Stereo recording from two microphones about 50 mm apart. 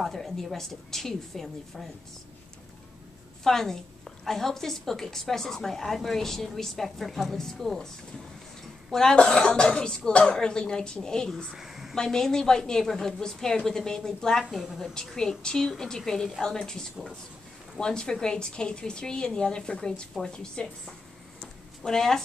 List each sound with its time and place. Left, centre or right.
0.0 s a woman's voice: centre
3.4 s a woman's voice: centre
8.9 s a woman's voice: centre
11.5 s a sound: centre
11.9 s a woman's voice: centre
14.4 s a woman's voice: centre
15.0 s a woman's voice: centre